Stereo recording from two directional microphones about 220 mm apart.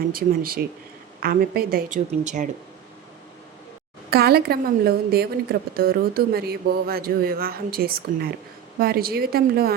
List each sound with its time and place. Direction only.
0.1 s a woman's voice: 40° right (ahead or behind)
4.1 s a woman's voice: 45° right (ahead or behind)